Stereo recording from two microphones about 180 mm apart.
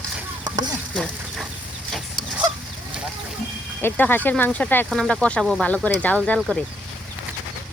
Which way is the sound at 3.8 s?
10° left (ahead or behind).